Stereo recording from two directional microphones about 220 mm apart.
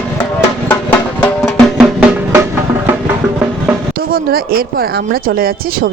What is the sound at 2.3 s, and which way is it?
Music, 10° right (ahead or behind).